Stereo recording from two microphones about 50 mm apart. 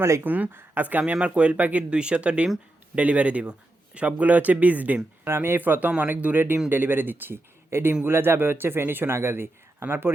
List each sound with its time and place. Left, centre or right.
0.2 s speech: right
1.1 s speech: right
1.5 s speech: right
1.9 s speech: centre
5.3 s speech: right